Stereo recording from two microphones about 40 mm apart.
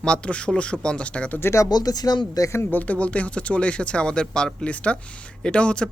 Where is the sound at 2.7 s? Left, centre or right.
Left.